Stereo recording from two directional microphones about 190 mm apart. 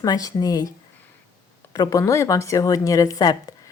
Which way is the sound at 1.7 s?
15° left (ahead or behind).